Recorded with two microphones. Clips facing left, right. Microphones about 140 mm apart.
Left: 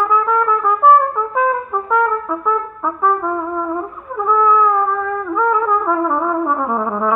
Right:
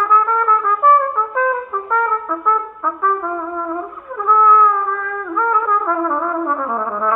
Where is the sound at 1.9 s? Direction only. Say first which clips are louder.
Left 2 dB; 10° left (ahead or behind).